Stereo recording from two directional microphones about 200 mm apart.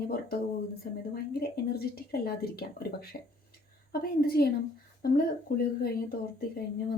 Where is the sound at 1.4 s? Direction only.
50° left (ahead or behind).